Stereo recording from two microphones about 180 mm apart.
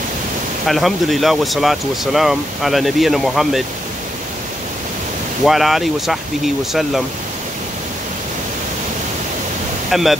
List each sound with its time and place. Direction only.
0.7 s speech: centre (ahead or behind)
5.4 s speech: centre (ahead or behind)
9.8 s speech: centre (ahead or behind)